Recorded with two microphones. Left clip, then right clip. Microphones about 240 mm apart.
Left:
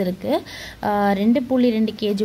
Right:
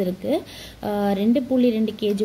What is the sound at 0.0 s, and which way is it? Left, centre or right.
A woman's voice, left.